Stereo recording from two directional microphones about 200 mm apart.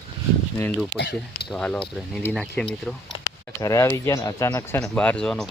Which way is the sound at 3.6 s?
15° left (ahead or behind).